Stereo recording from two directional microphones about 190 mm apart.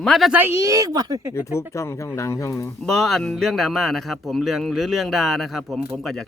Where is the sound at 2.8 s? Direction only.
Centre (ahead or behind).